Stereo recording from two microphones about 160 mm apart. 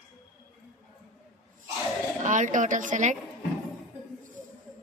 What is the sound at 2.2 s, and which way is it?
Speech, 50° right (ahead or behind).